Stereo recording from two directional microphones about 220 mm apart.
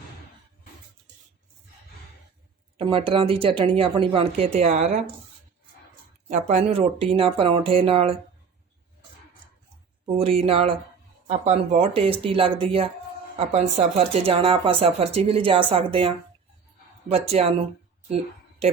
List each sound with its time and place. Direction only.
2.7 s speech: 25° right (ahead or behind)
6.3 s speech: 30° right (ahead or behind)
10.2 s speech: 25° right (ahead or behind)